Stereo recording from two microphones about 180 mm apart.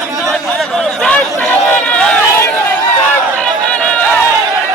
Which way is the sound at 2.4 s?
10° left (ahead or behind).